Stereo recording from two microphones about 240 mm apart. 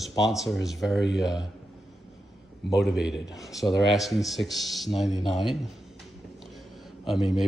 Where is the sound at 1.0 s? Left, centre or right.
Left.